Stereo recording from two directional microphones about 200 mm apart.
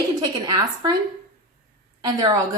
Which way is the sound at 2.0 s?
15° right (ahead or behind).